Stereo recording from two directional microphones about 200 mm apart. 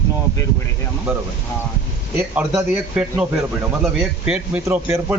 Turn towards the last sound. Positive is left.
turn(degrees=-10)  # may be behind; listen again after turning